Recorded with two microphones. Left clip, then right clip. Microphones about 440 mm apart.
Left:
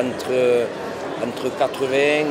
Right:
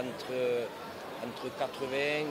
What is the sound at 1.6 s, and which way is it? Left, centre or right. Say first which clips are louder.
Speech: left 14 dB; right.